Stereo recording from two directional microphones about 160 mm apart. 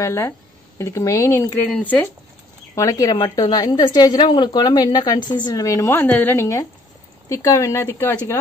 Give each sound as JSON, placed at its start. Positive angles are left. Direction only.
{"t": 0.0, "sound": "speech", "side_deg": 15}
{"t": 2.7, "sound": "a woman's voice", "side_deg": 20}